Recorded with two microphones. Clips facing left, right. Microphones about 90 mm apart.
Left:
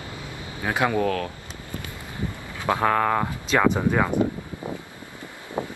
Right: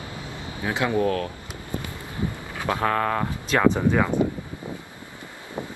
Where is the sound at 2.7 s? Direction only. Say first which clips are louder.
Left 2 dB; 20° left (ahead or behind).